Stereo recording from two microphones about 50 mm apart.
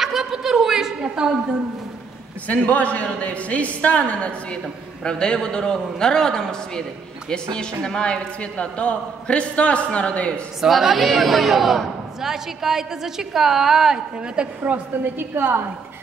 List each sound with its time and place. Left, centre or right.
0.0 s a sound: centre
2.4 s a man's voice: left; by 6.8 s centre
7.8 s a man's voice: centre
10.6 s a woman's voice: centre
14.6 s a woman's voice: right